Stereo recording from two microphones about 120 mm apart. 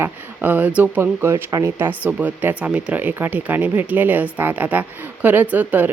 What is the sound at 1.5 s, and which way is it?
Speech, 35° right (ahead or behind).